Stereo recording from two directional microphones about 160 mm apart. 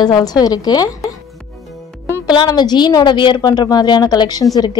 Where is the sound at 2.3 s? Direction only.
25° left (ahead or behind).